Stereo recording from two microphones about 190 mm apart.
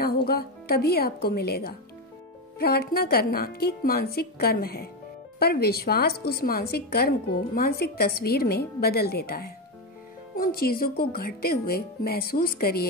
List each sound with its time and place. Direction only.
0.0 s a woman's voice: 55° left (ahead or behind)